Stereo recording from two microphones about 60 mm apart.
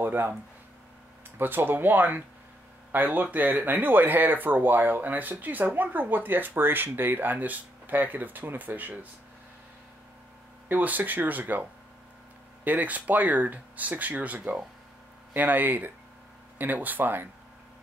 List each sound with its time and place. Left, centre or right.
0.0 s speech: right
1.4 s speech: right
10.7 s speech: right
12.6 s speech: right